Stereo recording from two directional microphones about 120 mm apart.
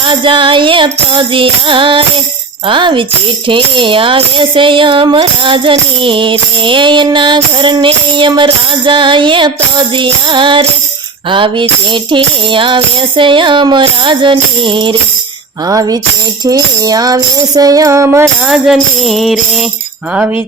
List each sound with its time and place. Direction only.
0.0 s music: 40° right (ahead or behind)
15.6 s music: 30° right (ahead or behind)
18.4 s music: 5° right (ahead or behind)